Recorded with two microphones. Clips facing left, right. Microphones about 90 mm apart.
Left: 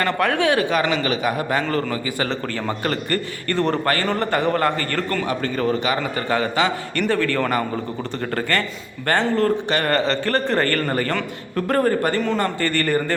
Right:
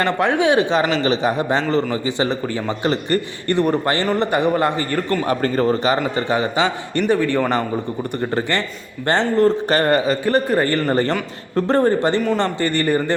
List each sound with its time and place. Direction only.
0.0 s a man's voice: 20° right (ahead or behind)
5.3 s a man's voice: 35° right (ahead or behind)
6.2 s a man's voice: 20° right (ahead or behind)
11.5 s a man's voice: 25° right (ahead or behind)